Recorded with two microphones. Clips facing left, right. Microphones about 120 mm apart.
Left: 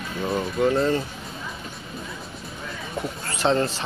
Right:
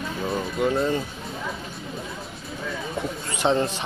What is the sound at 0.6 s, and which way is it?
Speech, 10° right (ahead or behind).